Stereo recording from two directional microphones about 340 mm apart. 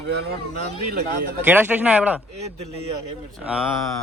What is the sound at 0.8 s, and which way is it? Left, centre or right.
Speech, right.